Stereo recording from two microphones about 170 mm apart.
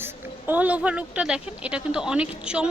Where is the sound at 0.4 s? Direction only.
10° right (ahead or behind).